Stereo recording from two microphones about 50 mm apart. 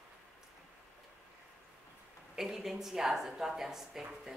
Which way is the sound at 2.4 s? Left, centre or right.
Centre.